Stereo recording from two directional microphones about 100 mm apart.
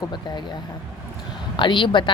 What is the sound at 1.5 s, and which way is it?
Speech, 55° left (ahead or behind).